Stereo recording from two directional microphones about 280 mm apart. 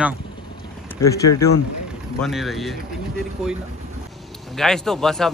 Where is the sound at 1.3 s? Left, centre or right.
Left.